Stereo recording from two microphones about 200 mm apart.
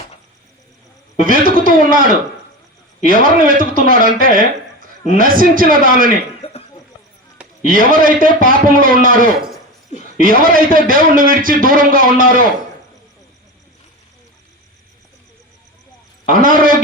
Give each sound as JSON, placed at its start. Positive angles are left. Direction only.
{"t": 1.2, "sound": "a man's voice", "side_deg": -45}
{"t": 6.4, "sound": "a sound", "side_deg": 30}
{"t": 7.6, "sound": "a man's voice", "side_deg": -45}
{"t": 16.3, "sound": "a man's voice", "side_deg": -45}